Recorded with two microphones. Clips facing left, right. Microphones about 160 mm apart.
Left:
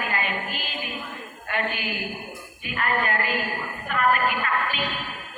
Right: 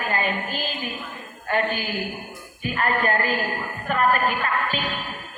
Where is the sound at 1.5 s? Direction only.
35° right (ahead or behind).